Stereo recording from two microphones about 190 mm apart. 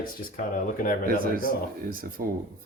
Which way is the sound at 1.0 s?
50° right (ahead or behind).